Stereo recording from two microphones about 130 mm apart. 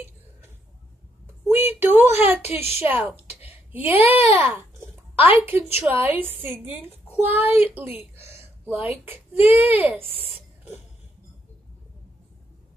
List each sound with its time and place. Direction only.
1.2 s a sound: 15° right (ahead or behind)
2.2 s a child's voice: 15° right (ahead or behind)
2.5 s a woman's voice: 55° left (ahead or behind)
2.8 s a child's voice: 15° right (ahead or behind)